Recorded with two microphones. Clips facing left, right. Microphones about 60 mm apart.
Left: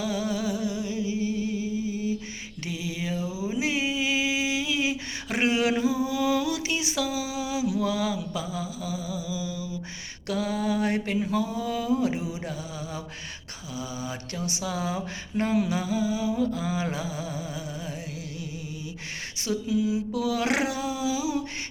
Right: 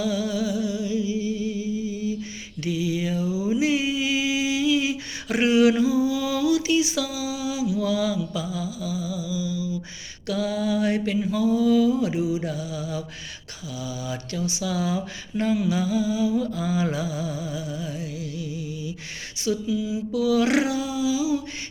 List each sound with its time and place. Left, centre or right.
0.0 s a sound: left
2.9 s a sound: centre; by 7.7 s left
8.0 s music: left
10.4 s mantra: left
11.9 s mantra: left
12.2 s music: centre
12.5 s mantra: left
13.7 s dog: left
14.3 s music: left
14.8 s dog: left
16.3 s music: centre
19.6 s dog: left